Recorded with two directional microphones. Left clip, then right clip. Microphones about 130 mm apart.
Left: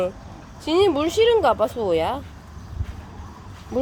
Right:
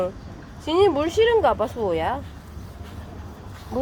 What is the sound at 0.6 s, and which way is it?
Speech, 45° left (ahead or behind).